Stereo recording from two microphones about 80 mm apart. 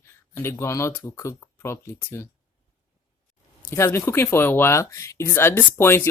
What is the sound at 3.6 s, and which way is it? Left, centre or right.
Speech, left.